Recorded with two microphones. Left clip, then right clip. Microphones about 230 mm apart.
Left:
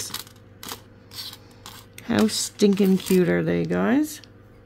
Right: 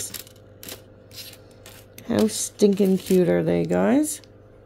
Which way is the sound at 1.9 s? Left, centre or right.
Centre.